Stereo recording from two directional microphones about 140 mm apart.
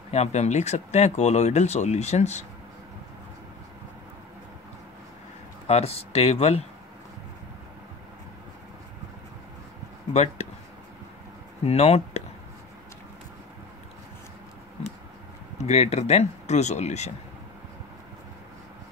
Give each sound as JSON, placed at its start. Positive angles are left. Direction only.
{"t": 0.1, "sound": "speech", "side_deg": 50}
{"t": 5.7, "sound": "speech", "side_deg": 45}
{"t": 10.1, "sound": "speech", "side_deg": 50}
{"t": 11.6, "sound": "speech", "side_deg": 45}
{"t": 15.5, "sound": "speech", "side_deg": 50}